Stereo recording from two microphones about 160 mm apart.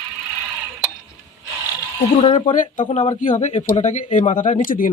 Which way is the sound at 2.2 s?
50° left (ahead or behind).